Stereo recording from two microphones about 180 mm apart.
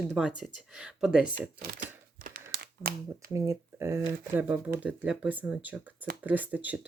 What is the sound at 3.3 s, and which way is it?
Speech, 15° right (ahead or behind).